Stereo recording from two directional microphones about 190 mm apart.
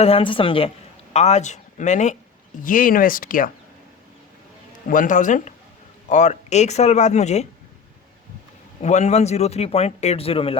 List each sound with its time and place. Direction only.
0.0 s a woman's voice: 30° left (ahead or behind); by 3.5 s 45° left (ahead or behind)
4.9 s speech: 45° left (ahead or behind)
8.8 s speech: 35° left (ahead or behind)